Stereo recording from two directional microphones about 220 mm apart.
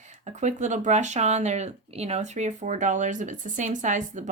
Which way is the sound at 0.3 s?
30° right (ahead or behind).